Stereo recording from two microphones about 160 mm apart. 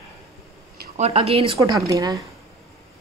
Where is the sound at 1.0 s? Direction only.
40° right (ahead or behind).